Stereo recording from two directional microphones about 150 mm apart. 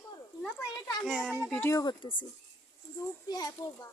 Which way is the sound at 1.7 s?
25° left (ahead or behind).